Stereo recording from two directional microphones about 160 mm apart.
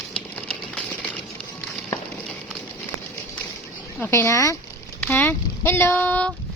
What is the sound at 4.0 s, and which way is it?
Speech, 15° left (ahead or behind).